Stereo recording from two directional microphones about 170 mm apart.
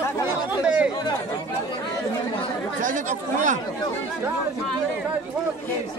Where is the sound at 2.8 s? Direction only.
50° right (ahead or behind).